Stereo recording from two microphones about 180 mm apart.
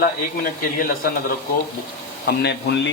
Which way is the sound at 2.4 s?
70° left (ahead or behind).